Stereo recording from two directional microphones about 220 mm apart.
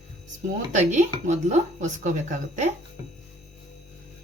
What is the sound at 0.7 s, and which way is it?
Speech, 35° right (ahead or behind).